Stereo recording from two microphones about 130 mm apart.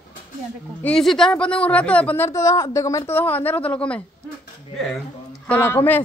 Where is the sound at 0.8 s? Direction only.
5° left (ahead or behind).